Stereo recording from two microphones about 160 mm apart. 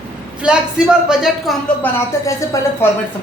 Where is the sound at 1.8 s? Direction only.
15° left (ahead or behind).